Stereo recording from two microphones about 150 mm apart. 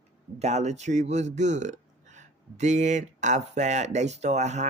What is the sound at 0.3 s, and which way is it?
Speech, 50° right (ahead or behind).